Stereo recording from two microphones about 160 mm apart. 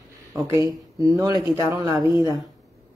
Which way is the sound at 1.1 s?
20° right (ahead or behind).